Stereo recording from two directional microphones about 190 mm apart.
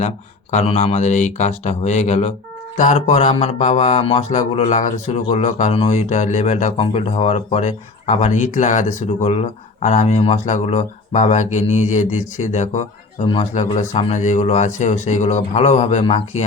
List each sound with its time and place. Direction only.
0.5 s speech: 35° left (ahead or behind)